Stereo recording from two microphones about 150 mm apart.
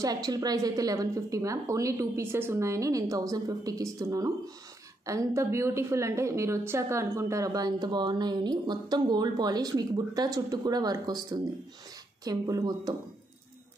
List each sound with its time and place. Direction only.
0.0 s a woman's voice: 25° right (ahead or behind)